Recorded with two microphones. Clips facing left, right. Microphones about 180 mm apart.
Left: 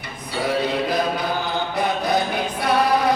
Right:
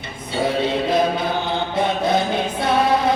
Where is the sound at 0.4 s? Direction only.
25° right (ahead or behind).